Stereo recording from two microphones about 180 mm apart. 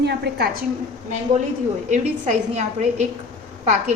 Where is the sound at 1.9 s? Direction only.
40° right (ahead or behind).